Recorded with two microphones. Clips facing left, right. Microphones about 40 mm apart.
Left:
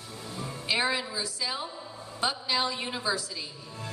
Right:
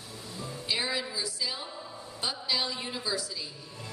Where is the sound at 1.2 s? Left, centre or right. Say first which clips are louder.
Left 2 dB; left.